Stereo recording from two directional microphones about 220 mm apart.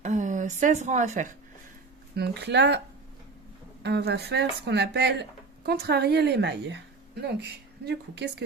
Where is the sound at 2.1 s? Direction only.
45° right (ahead or behind).